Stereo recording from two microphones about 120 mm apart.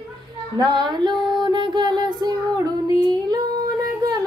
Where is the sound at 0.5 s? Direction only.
35° right (ahead or behind).